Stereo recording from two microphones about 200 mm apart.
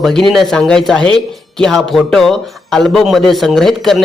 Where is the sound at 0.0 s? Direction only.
Centre (ahead or behind).